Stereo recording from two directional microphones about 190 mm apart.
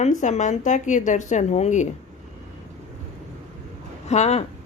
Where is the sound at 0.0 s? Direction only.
40° left (ahead or behind).